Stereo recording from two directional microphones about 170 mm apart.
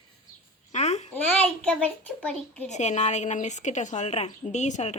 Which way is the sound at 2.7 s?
45° left (ahead or behind).